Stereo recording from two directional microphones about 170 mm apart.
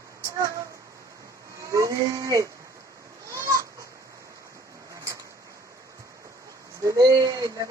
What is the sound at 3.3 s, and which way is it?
Goat, 20° right (ahead or behind).